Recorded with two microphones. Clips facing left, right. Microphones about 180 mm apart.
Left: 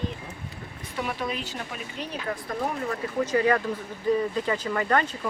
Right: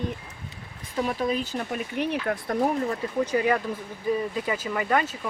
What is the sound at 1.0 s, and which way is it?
Speech, 40° right (ahead or behind).